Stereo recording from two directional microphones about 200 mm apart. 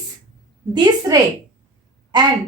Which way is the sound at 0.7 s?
20° right (ahead or behind).